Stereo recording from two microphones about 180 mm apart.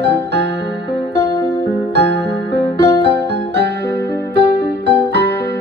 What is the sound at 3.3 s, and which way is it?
Keyboard, 70° right (ahead or behind).